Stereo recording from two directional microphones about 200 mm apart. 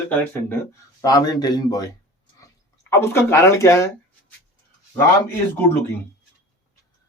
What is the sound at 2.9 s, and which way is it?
Speech, 15° left (ahead or behind).